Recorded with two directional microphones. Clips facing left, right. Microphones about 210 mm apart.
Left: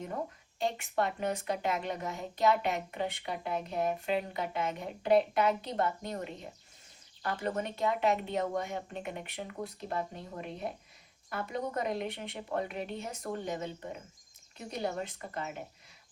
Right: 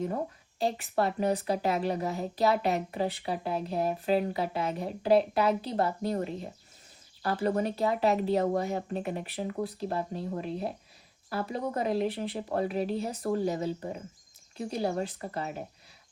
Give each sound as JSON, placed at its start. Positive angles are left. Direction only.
{"t": 0.6, "sound": "a woman's voice", "side_deg": -35}